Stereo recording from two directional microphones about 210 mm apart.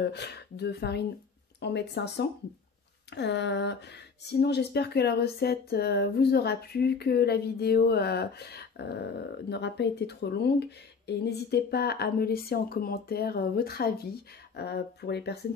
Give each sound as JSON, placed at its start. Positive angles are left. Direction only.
{"t": 0.0, "sound": "speech", "side_deg": 50}